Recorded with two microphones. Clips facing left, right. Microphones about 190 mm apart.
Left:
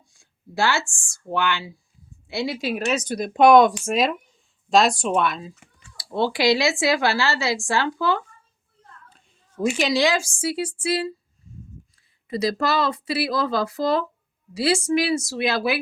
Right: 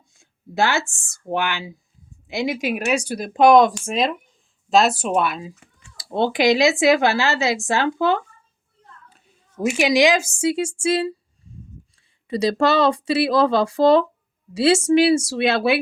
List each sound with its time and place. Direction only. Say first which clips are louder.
0.1 s a sound: right 3 dB; 20° right (ahead or behind)
1.3 s a woman's voice: right 1 dB; 15° right (ahead or behind)
6.0 s speech: right 3 dB; 20° right (ahead or behind)
9.0 s a woman's voice: right 1 dB; 10° right (ahead or behind)
12.3 s speech: right 4 dB; 30° right (ahead or behind)